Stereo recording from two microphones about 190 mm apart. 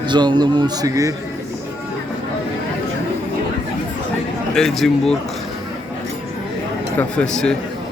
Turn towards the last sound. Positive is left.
turn(degrees=5)  # may be behind; listen again after turning